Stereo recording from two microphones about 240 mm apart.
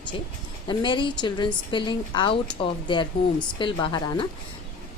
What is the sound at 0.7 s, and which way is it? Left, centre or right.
A woman's voice, centre.